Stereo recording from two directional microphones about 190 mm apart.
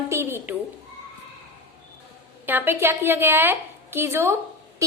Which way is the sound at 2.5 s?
10° right (ahead or behind).